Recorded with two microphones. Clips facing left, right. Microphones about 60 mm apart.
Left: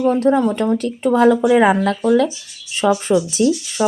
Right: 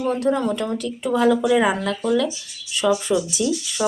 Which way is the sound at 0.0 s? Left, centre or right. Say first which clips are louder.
Left 6 dB; left.